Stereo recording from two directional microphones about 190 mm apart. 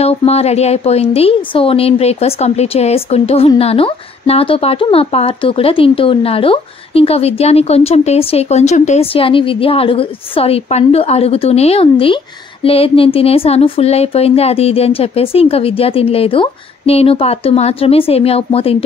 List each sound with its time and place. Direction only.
0.0 s a woman's voice: 35° left (ahead or behind)